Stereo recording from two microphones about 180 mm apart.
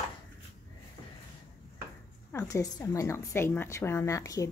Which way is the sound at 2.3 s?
15° left (ahead or behind).